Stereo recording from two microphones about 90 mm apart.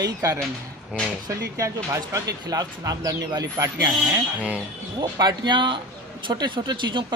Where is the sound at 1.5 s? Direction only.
35° right (ahead or behind).